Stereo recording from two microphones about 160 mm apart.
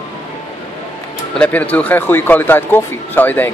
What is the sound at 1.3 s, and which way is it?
Speech, 10° left (ahead or behind).